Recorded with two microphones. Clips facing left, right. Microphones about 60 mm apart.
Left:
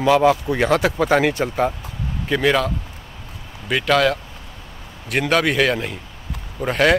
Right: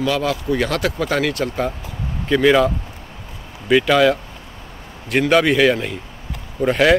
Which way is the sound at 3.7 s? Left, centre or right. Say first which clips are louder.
Right 3 dB; centre.